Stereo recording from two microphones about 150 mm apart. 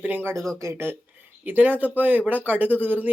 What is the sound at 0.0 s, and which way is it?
Speech, 10° right (ahead or behind).